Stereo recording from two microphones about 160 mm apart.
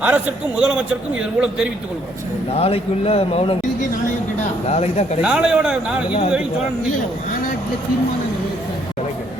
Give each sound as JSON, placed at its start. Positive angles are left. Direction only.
{"t": 0.0, "sound": "a man's voice", "side_deg": -10}
{"t": 2.5, "sound": "a man's voice", "side_deg": 35}
{"t": 4.7, "sound": "speech", "side_deg": 40}
{"t": 5.2, "sound": "a man's voice", "side_deg": -5}